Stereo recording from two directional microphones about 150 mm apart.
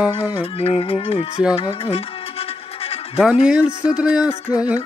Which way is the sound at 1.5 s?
40° left (ahead or behind).